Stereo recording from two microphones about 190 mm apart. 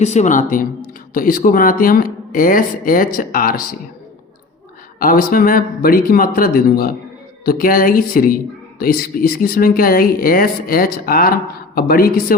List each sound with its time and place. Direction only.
0.0 s speech: 35° left (ahead or behind)
4.9 s speech: 50° left (ahead or behind)